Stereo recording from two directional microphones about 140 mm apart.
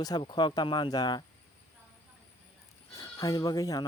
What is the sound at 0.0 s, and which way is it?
Speech, 30° left (ahead or behind).